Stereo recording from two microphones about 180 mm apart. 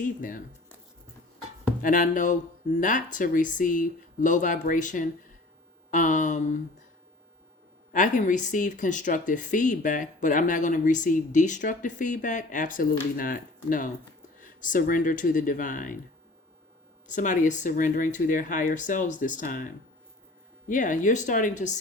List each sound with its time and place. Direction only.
0.0 s speech: 50° left (ahead or behind)
1.8 s speech: 45° left (ahead or behind)
7.9 s speech: 45° left (ahead or behind)
17.1 s speech: 45° left (ahead or behind)